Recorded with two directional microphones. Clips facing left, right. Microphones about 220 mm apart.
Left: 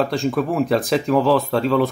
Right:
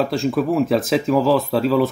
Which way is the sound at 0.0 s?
Centre (ahead or behind).